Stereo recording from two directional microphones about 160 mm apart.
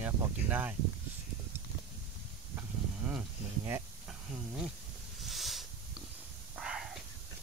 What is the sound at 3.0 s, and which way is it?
Speech, 15° right (ahead or behind).